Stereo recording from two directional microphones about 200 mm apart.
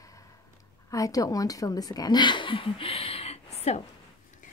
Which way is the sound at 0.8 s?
15° left (ahead or behind).